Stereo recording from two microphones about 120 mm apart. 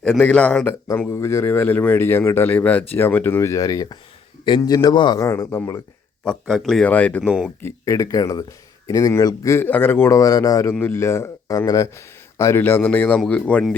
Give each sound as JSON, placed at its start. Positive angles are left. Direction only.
{"t": 0.0, "sound": "a man's voice", "side_deg": 5}
{"t": 5.2, "sound": "speech", "side_deg": 25}
{"t": 6.2, "sound": "speech", "side_deg": 0}
{"t": 7.6, "sound": "speech", "side_deg": 25}